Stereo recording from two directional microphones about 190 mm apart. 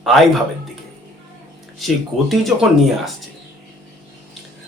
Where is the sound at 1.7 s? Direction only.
Centre (ahead or behind).